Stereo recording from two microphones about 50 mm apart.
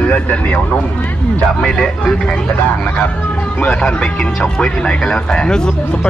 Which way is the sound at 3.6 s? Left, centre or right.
Centre.